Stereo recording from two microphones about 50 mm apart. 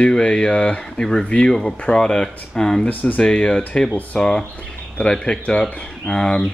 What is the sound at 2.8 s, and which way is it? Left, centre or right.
Speech, left.